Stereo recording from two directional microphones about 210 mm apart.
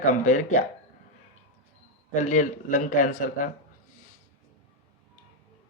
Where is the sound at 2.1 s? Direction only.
35° left (ahead or behind).